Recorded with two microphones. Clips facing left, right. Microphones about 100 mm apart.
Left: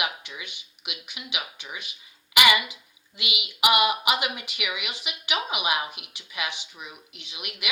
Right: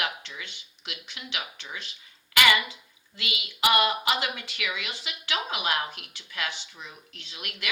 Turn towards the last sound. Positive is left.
turn(degrees=15)  # may be behind; listen again after turning